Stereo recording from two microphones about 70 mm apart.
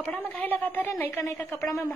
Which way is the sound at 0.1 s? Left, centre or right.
Left.